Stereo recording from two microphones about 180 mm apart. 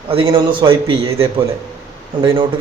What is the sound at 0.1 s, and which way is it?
A man's voice, 30° right (ahead or behind).